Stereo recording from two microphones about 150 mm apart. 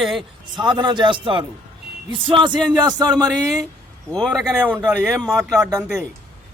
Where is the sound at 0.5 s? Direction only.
30° right (ahead or behind).